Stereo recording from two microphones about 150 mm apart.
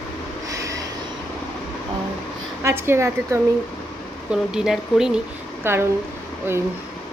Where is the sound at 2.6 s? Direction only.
15° right (ahead or behind).